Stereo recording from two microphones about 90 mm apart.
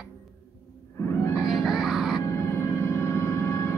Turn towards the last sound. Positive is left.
turn(degrees=30)  # may be behind; listen again after turning